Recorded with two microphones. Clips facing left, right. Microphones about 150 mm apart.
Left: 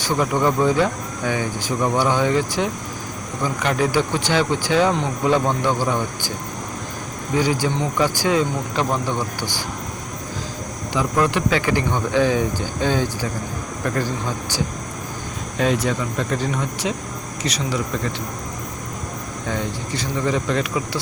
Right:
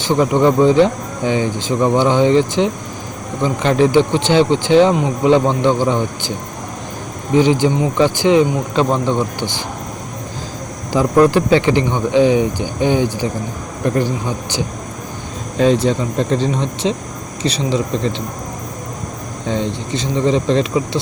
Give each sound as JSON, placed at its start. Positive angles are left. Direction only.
{"t": 0.0, "sound": "speech", "side_deg": -25}
{"t": 7.3, "sound": "speech", "side_deg": -20}
{"t": 10.9, "sound": "speech", "side_deg": -35}
{"t": 15.5, "sound": "speech", "side_deg": -30}
{"t": 19.5, "sound": "speech", "side_deg": -25}